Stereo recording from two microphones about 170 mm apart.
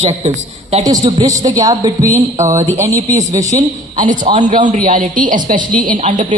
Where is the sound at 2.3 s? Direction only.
40° right (ahead or behind).